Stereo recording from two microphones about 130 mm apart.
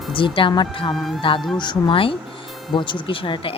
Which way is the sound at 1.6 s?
35° left (ahead or behind).